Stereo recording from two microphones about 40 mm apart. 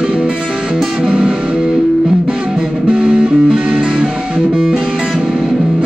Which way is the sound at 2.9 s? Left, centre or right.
Centre.